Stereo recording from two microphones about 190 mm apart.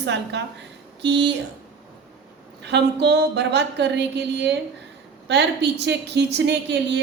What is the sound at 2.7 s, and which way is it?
A woman's voice, 65° right (ahead or behind).